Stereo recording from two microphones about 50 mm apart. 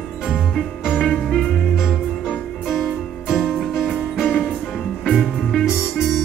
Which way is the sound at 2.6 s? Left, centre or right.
Centre.